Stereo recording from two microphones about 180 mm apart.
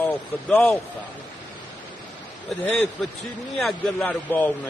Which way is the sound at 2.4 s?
5° left (ahead or behind).